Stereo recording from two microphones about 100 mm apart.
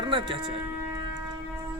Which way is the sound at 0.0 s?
55° right (ahead or behind).